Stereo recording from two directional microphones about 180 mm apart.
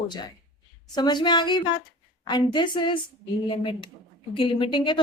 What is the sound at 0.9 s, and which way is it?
A woman's voice, 25° left (ahead or behind).